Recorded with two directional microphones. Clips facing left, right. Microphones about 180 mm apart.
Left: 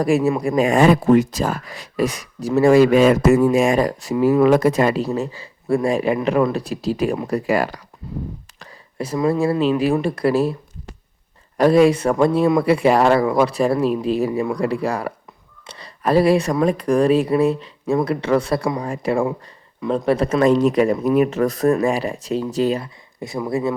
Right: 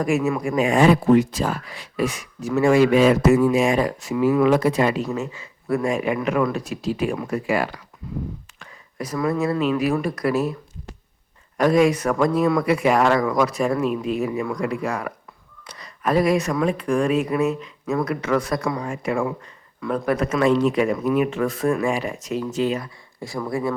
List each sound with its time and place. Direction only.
0.0 s speech: 35° left (ahead or behind)
11.5 s speech: 30° left (ahead or behind)
23.2 s speech: 20° left (ahead or behind)